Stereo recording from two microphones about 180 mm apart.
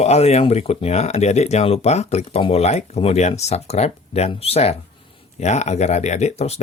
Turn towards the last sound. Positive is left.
turn(degrees=40)  # may be behind; listen again after turning